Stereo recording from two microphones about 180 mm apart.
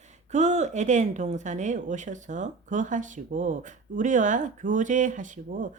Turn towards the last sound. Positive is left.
turn(degrees=-45)  # may be behind; listen again after turning